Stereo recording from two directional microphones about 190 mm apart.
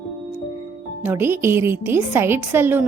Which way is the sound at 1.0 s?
10° right (ahead or behind).